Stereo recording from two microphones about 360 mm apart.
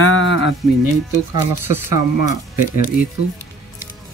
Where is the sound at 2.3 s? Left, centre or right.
Left.